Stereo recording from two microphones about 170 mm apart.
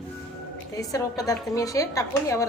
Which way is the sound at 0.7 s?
20° left (ahead or behind).